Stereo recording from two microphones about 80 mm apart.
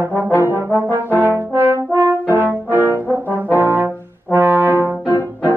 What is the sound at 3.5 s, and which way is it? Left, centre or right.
Brass instrument, right.